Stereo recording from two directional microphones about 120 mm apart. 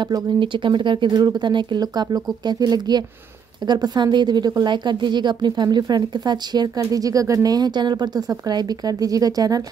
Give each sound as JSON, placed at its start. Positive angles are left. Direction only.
{"t": 0.0, "sound": "a woman's voice", "side_deg": -40}